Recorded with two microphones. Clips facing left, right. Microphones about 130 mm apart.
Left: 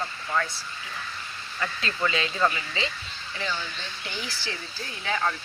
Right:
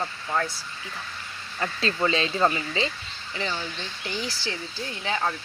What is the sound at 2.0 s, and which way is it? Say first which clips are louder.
Speech: right 2 dB; 30° right (ahead or behind).